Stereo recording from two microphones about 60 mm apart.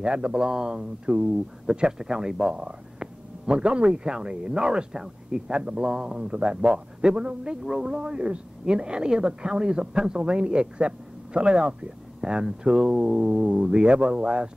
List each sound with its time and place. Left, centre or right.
0.0 s a woman's voice: centre